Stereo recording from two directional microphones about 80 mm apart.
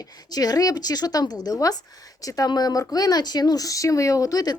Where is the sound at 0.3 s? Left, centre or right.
Left.